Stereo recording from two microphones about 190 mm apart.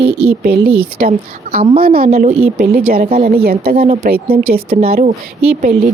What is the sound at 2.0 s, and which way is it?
Speech, 30° right (ahead or behind).